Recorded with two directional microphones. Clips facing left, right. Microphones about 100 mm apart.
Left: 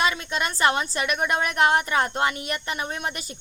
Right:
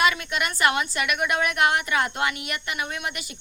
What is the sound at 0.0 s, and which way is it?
A woman's voice, 30° left (ahead or behind).